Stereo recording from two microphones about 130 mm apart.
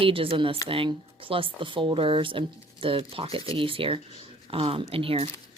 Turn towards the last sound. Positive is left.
turn(degrees=-45)  # may be behind; listen again after turning